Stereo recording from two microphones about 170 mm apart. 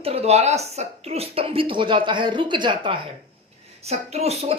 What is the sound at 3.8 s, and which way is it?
Speech, 40° right (ahead or behind).